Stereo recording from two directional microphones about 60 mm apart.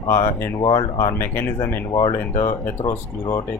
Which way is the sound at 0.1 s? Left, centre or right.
Left.